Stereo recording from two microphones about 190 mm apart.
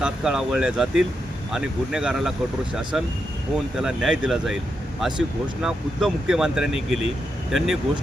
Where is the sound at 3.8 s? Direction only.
5° right (ahead or behind).